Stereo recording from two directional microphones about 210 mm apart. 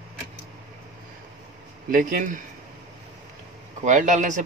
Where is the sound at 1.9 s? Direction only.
40° right (ahead or behind).